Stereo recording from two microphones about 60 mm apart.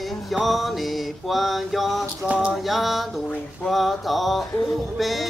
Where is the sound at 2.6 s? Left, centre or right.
Centre.